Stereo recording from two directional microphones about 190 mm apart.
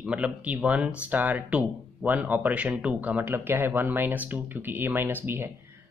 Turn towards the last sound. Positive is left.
turn(degrees=-10)  # may be behind; listen again after turning